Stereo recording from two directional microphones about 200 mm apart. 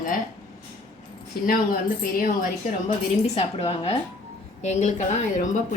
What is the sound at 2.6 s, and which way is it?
Speech, 40° left (ahead or behind).